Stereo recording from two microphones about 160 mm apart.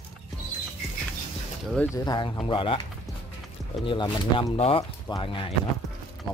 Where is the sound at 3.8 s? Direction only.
30° left (ahead or behind).